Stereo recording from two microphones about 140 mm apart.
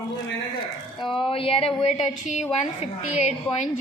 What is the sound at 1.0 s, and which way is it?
A woman's voice, 40° left (ahead or behind).